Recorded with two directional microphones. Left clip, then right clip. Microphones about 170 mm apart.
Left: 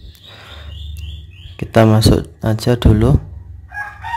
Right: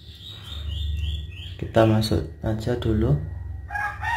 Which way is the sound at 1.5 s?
35° left (ahead or behind).